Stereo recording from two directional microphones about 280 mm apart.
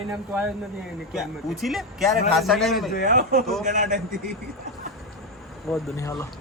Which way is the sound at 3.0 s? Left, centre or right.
Right.